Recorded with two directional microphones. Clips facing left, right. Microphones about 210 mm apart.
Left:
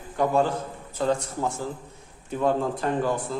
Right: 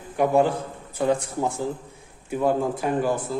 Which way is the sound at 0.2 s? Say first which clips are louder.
Right 3 dB; 15° right (ahead or behind).